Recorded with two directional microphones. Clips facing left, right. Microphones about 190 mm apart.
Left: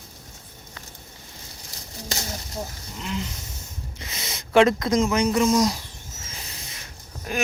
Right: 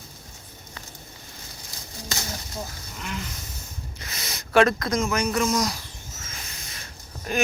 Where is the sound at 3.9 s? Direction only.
25° left (ahead or behind).